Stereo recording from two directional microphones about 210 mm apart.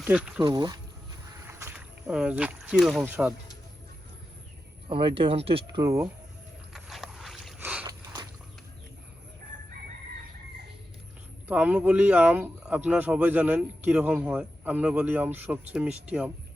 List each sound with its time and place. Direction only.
0.0 s speech: 5° right (ahead or behind)
0.4 s speech: 20° right (ahead or behind)
1.5 s rowboat: 10° right (ahead or behind)
3.0 s speech: 5° right (ahead or behind)
4.9 s speech: 25° right (ahead or behind)
6.7 s a sound: centre (ahead or behind)
7.9 s biting: 20° right (ahead or behind)
11.4 s speech: 5° right (ahead or behind)